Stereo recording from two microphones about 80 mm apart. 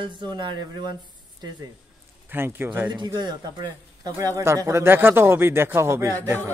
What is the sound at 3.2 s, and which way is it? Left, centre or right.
Speech, right.